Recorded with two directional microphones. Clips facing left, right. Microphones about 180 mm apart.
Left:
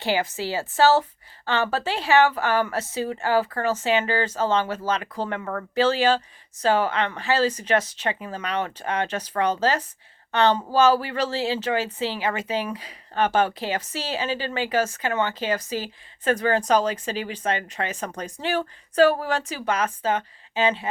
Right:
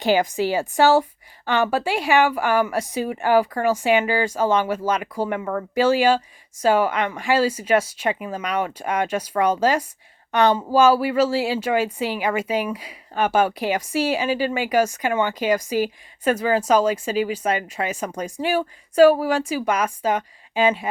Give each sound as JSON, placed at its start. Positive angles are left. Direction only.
{"t": 0.0, "sound": "speech", "side_deg": -15}